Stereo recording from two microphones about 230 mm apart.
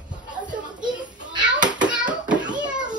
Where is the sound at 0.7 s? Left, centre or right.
Centre.